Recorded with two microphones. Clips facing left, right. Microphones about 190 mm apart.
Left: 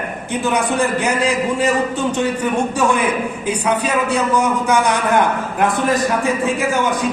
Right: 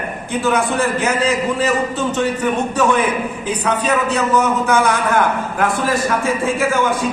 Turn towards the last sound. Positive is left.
turn(degrees=15)  # may be behind; listen again after turning